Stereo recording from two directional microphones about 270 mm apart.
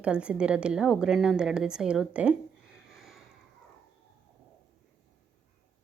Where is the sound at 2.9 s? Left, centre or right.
Centre.